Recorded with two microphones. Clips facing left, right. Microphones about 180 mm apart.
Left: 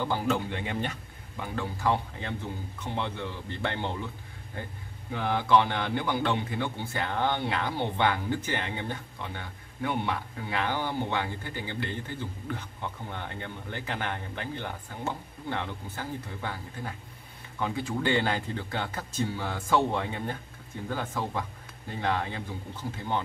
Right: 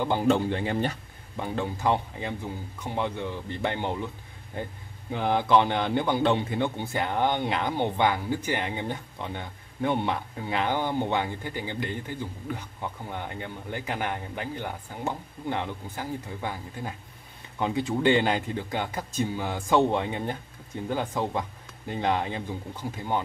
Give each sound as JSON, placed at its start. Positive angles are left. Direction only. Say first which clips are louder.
{"t": 0.0, "sound": "speech", "louder": "right 5 dB", "side_deg": -20}
{"t": 0.5, "sound": "a man's voice", "louder": "right 5 dB", "side_deg": -35}
{"t": 5.1, "sound": "a man's voice", "louder": "right 2 dB", "side_deg": -20}